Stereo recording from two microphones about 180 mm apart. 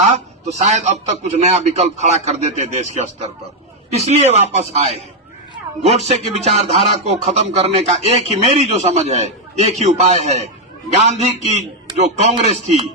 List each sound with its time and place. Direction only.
0.1 s speech: 40° right (ahead or behind)